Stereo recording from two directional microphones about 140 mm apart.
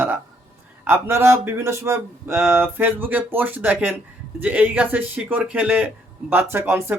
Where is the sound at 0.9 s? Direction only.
15° right (ahead or behind).